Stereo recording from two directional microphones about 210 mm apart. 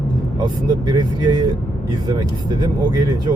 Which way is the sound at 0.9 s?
20° right (ahead or behind).